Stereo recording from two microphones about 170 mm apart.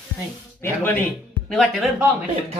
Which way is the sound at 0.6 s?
10° left (ahead or behind).